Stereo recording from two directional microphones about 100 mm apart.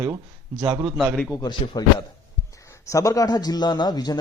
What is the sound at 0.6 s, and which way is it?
Speech, 50° right (ahead or behind).